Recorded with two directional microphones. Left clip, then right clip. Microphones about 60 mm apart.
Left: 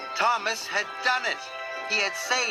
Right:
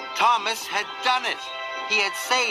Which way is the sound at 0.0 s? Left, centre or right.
Right.